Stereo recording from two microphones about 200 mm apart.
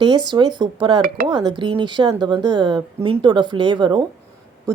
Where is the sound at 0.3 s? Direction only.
20° right (ahead or behind).